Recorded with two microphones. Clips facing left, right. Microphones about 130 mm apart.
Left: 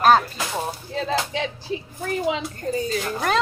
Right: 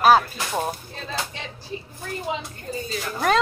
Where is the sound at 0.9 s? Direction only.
90° left.